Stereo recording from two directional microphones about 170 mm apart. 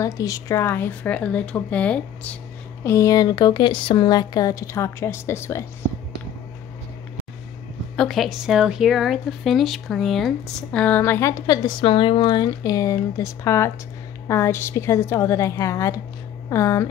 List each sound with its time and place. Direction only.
0.0 s speech: 20° left (ahead or behind)
2.8 s speech: 20° left (ahead or behind)
7.9 s speech: centre (ahead or behind); by 16.9 s 20° left (ahead or behind)